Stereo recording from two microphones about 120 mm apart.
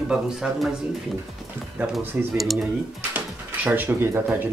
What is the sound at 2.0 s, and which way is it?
Speech, 15° right (ahead or behind).